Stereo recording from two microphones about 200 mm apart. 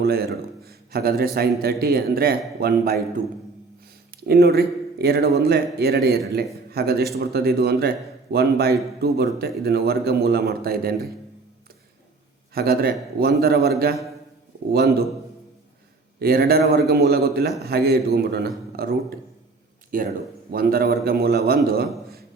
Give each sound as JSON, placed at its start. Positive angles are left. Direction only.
{"t": 0.0, "sound": "a man's voice", "side_deg": -50}
{"t": 4.2, "sound": "a man's voice", "side_deg": -50}
{"t": 12.5, "sound": "a man's voice", "side_deg": -50}
{"t": 16.2, "sound": "a man's voice", "side_deg": -50}